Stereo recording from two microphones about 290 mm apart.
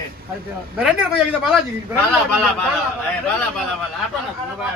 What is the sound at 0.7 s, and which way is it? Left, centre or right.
Speech, centre.